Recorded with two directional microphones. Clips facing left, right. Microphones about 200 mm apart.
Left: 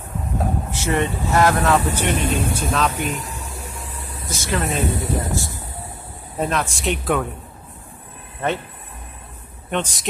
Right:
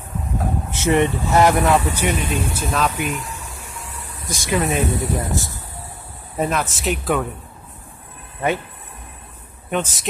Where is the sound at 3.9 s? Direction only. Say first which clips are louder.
Left 2 dB; 30° left (ahead or behind).